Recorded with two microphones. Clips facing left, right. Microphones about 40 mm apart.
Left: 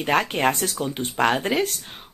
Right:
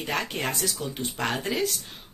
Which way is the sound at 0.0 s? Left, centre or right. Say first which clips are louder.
Left 8 dB; left.